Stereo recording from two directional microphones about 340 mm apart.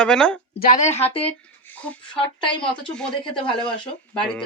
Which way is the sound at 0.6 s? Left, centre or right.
Left.